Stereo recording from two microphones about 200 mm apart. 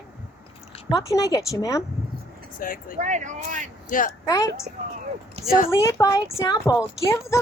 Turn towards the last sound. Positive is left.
turn(degrees=15)  # may be behind; listen again after turning